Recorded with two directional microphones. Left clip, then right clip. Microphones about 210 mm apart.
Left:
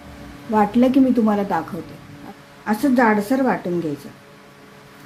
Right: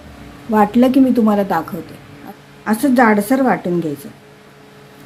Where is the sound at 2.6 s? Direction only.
15° right (ahead or behind).